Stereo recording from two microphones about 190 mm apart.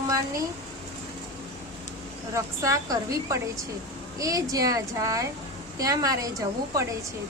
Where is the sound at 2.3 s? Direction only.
15° right (ahead or behind).